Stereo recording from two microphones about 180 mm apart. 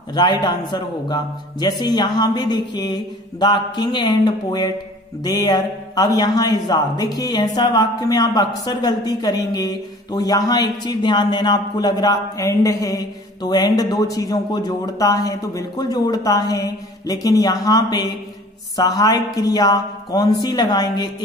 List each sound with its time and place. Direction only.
0.1 s a man's voice: 25° left (ahead or behind)